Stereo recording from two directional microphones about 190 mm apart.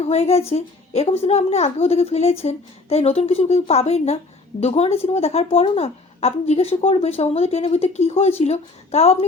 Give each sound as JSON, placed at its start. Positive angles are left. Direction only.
{"t": 0.0, "sound": "a child's voice", "side_deg": 35}